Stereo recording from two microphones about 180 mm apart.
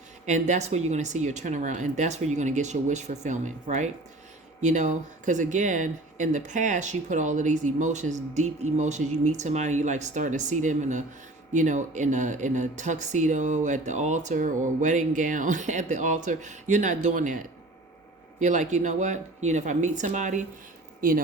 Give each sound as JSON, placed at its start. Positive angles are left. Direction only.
{"t": 0.3, "sound": "speech", "side_deg": -40}